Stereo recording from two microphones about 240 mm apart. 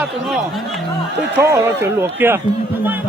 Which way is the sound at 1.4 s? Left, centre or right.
Centre.